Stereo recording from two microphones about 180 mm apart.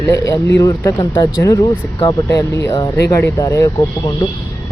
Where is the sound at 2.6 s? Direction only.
20° left (ahead or behind).